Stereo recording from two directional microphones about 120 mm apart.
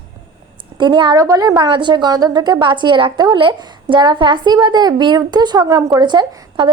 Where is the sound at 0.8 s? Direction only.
40° right (ahead or behind).